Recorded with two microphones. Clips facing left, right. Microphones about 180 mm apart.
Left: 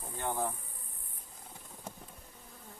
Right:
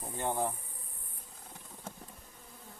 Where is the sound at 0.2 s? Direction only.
20° right (ahead or behind).